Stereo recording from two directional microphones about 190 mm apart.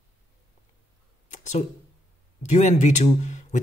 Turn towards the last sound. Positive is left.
turn(degrees=40)  # may be behind; listen again after turning